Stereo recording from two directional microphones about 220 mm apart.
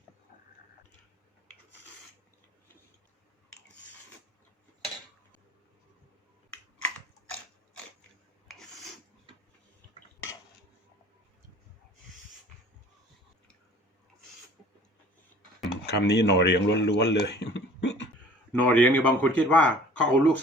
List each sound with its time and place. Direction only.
15.9 s speech: 50° left (ahead or behind)
18.5 s speech: 5° left (ahead or behind)